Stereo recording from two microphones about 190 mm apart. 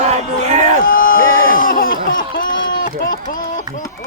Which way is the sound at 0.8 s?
50° left (ahead or behind).